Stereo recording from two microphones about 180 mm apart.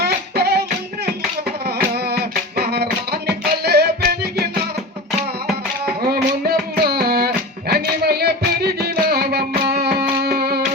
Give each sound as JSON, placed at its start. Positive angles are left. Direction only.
{"t": 0.0, "sound": "music", "side_deg": -65}
{"t": 5.8, "sound": "music", "side_deg": -55}